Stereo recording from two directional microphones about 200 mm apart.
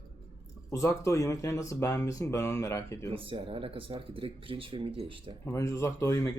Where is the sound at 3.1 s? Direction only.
25° right (ahead or behind).